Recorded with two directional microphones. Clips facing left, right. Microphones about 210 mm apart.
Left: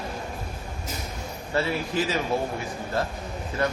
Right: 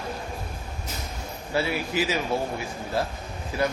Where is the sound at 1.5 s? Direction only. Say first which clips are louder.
Even; 5° right (ahead or behind).